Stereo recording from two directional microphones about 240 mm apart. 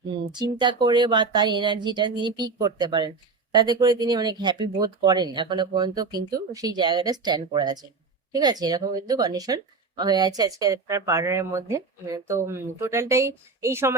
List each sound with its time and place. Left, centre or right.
0.1 s a woman's voice: centre